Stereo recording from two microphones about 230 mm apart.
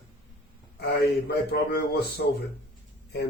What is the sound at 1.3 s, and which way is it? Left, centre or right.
Speech, left.